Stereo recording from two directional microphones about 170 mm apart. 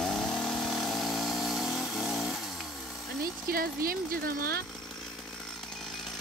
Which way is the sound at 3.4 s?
60° right (ahead or behind).